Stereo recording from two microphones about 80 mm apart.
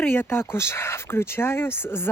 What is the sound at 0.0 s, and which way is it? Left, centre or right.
Speech, left.